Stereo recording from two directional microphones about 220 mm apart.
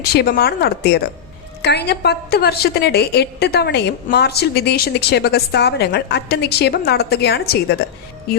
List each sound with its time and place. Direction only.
0.1 s a woman's voice: 45° left (ahead or behind)